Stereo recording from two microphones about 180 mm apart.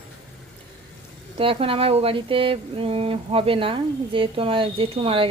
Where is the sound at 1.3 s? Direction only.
30° right (ahead or behind).